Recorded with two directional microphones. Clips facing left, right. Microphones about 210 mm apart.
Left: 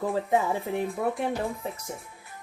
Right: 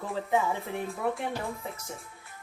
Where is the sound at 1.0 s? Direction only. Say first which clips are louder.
Even; 30° left (ahead or behind).